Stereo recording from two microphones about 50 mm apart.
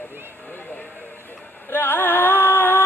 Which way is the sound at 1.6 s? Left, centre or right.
Left.